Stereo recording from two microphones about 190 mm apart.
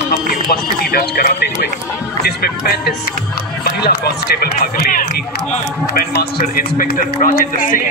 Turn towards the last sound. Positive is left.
turn(degrees=45)  # may be behind; listen again after turning